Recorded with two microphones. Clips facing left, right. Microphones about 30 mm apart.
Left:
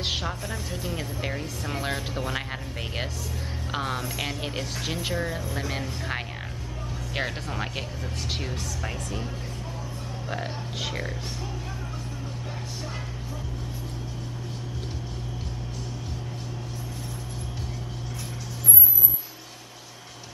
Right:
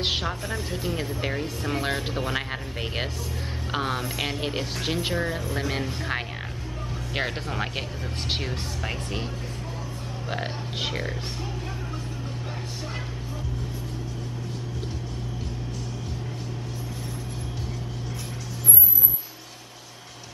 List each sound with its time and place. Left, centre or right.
0.0 s speech: centre
10.3 s speech: right